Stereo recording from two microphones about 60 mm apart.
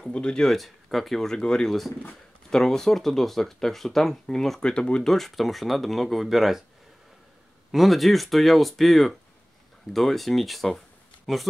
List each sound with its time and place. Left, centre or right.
0.0 s speech: centre
0.6 s speech: centre
4.6 s speech: centre
5.0 s speech: centre
7.7 s speech: centre